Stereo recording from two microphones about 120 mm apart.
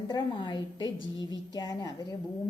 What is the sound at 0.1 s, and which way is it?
A woman's voice, 40° left (ahead or behind).